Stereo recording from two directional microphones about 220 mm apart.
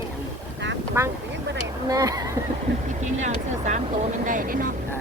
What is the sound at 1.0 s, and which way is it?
Speech, 10° right (ahead or behind).